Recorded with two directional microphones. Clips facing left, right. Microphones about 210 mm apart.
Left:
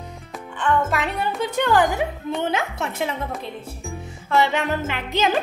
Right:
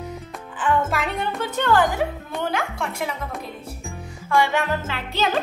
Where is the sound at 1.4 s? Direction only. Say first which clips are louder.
Left 1 dB; 15° left (ahead or behind).